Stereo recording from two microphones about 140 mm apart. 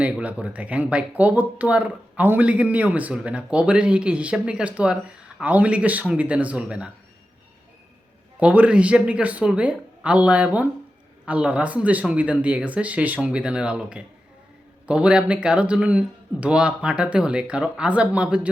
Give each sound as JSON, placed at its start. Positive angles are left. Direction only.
{"t": 0.0, "sound": "speech", "side_deg": -10}
{"t": 8.4, "sound": "speech", "side_deg": -10}